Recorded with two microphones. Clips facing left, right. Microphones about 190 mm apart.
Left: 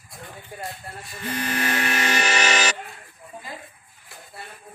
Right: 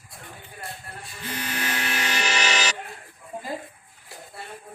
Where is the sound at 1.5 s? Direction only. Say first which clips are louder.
Left 5 dB; 55° left (ahead or behind).